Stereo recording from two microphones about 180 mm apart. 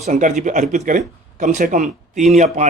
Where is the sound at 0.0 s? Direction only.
45° right (ahead or behind).